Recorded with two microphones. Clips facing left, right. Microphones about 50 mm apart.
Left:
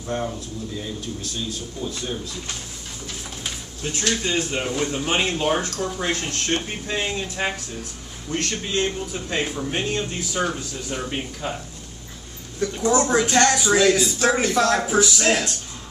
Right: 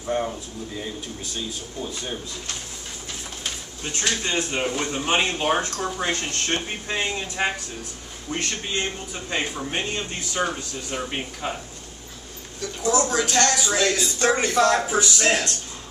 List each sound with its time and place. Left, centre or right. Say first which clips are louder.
0.1 s speech: right 1 dB; centre
3.4 s pigeon: left 2 dB; centre
4.0 s speech: left 1 dB; centre
6.0 s speech: left 2 dB; centre
8.3 s speech: left 2 dB; centre
12.5 s a woman's voice: left 3 dB; left
13.2 s speech: left 3 dB; centre